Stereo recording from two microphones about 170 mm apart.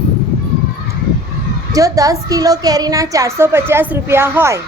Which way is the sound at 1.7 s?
20° right (ahead or behind).